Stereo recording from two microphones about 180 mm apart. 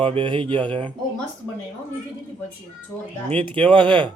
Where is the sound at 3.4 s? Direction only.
5° left (ahead or behind).